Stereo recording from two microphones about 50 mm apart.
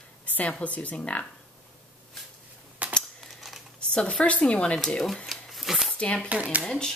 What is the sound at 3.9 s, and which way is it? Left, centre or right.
Speech, left.